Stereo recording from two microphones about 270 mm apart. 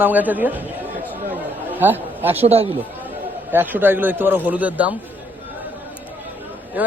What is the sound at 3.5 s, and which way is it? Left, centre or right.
Speech, centre.